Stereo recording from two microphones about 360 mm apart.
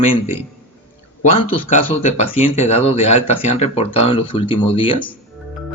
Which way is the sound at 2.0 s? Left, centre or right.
Centre.